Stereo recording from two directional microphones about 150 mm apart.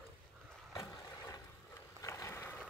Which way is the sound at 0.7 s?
20° left (ahead or behind).